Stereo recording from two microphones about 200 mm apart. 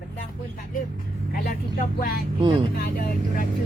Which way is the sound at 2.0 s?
45° left (ahead or behind).